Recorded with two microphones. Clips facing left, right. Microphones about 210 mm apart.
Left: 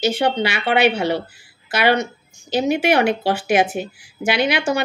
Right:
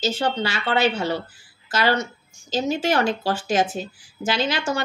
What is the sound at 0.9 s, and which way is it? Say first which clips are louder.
Speech: left 4 dB; 15° left (ahead or behind).